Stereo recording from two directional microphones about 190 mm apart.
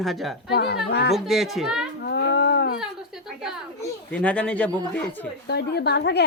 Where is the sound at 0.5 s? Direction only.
60° left (ahead or behind).